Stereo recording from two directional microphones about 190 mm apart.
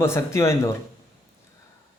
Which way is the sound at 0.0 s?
15° left (ahead or behind).